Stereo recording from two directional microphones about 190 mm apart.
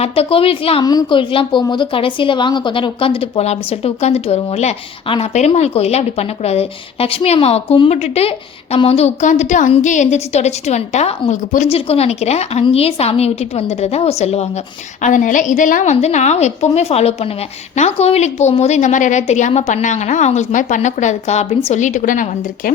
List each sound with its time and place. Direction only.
0.0 s a woman's voice: 30° left (ahead or behind)